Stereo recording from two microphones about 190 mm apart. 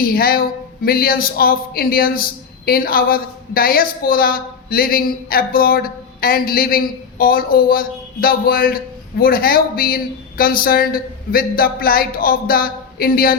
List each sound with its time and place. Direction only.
0.0 s a woman's voice: 50° left (ahead or behind)